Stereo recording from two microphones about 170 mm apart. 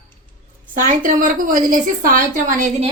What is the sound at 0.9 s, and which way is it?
A woman's voice, 50° right (ahead or behind).